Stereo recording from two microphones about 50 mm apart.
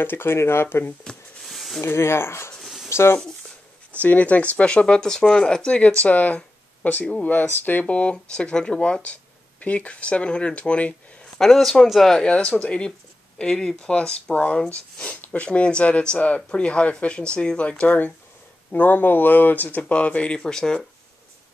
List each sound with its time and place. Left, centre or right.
0.0 s speech: left
1.4 s a sound: centre
1.8 s speech: left
2.6 s a sound: centre
2.9 s a sound: left
3.9 s speech: left
7.4 s speech: left
7.9 s speech: left
11.3 s speech: centre
12.3 s speech: left
19.9 s speech: left